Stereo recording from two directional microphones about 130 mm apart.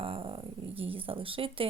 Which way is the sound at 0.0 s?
45° right (ahead or behind).